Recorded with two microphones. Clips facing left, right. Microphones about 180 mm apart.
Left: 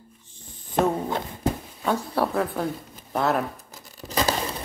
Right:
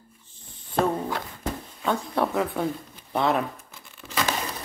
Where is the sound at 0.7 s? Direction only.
20° left (ahead or behind).